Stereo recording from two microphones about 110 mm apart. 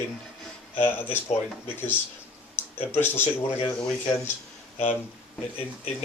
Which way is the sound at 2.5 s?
20° left (ahead or behind).